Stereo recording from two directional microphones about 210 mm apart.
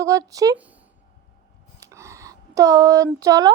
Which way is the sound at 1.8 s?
15° right (ahead or behind).